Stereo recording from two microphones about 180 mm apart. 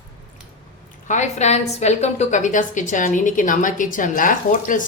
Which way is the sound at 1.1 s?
40° left (ahead or behind).